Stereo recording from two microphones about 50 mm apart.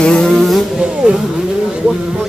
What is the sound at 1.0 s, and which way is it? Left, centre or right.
Speech, centre.